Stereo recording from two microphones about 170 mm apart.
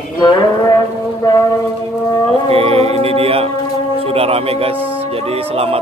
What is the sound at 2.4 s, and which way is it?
Music, 35° right (ahead or behind).